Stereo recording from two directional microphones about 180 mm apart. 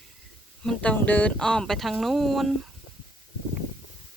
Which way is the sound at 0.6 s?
5° left (ahead or behind).